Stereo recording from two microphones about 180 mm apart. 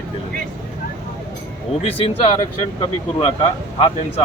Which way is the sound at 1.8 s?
30° left (ahead or behind).